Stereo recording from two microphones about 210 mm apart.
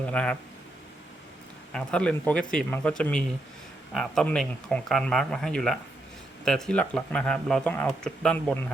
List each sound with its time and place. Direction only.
0.0 s speech: 5° left (ahead or behind)
1.7 s speech: 5° left (ahead or behind)